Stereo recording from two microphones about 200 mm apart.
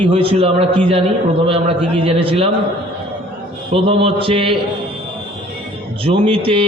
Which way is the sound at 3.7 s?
30° right (ahead or behind).